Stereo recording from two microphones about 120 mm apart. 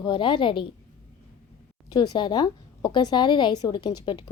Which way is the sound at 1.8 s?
35° left (ahead or behind).